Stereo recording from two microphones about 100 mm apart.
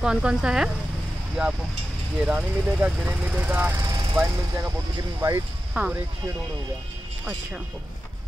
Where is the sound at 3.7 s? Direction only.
40° right (ahead or behind).